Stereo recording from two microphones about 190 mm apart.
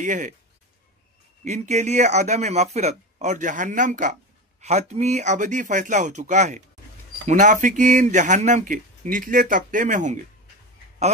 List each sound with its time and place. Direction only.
0.0 s speech: 40° right (ahead or behind)
1.4 s speech: 35° right (ahead or behind)